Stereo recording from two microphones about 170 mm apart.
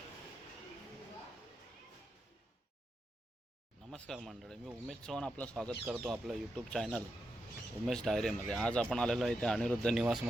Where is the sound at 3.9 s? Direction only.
5° left (ahead or behind).